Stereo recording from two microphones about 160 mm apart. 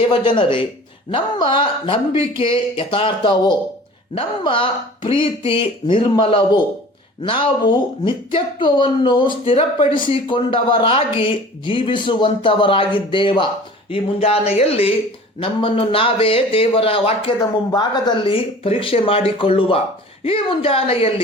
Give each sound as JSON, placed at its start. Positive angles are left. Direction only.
{"t": 0.1, "sound": "speech", "side_deg": 30}